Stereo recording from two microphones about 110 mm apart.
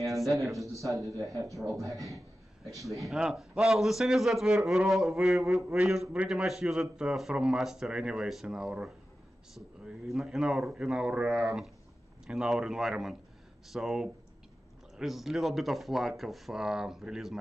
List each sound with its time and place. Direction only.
0.2 s a man's voice: centre (ahead or behind)
1.0 s speech: 30° right (ahead or behind)
3.0 s a man's voice: 5° right (ahead or behind)